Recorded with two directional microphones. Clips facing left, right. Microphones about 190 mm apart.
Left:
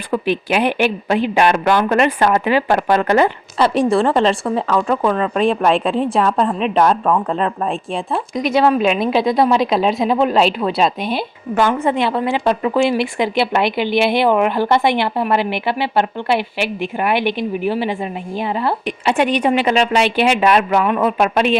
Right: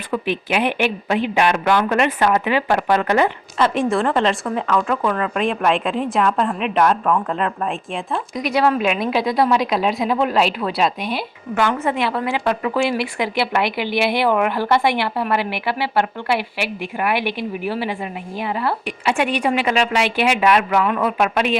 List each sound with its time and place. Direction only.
0.1 s a woman's voice: 40° left (ahead or behind)